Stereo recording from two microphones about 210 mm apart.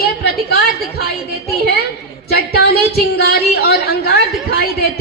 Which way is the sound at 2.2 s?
50° left (ahead or behind).